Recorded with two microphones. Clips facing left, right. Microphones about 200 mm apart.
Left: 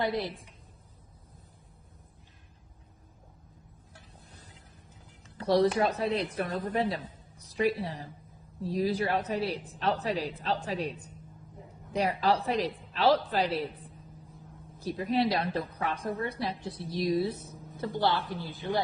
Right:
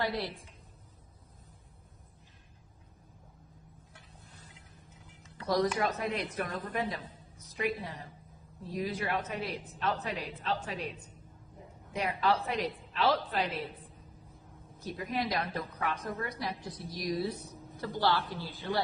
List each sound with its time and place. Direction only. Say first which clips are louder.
0.0 s a woman's voice: left 3 dB; 20° left (ahead or behind)
5.4 s a woman's voice: left 5 dB; 30° left (ahead or behind)
11.9 s a woman's voice: left 3 dB; 35° left (ahead or behind)
14.8 s a woman's voice: left 7 dB; 30° left (ahead or behind)